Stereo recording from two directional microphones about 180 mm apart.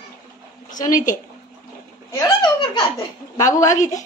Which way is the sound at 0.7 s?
45° left (ahead or behind).